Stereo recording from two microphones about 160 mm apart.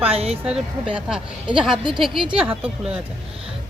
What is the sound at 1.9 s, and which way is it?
Speech, 5° right (ahead or behind).